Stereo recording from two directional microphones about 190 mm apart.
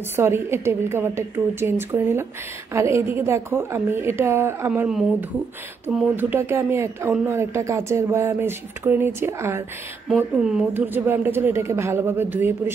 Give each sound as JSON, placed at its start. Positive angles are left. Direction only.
{"t": 0.1, "sound": "speech", "side_deg": -10}
{"t": 6.1, "sound": "speech", "side_deg": -10}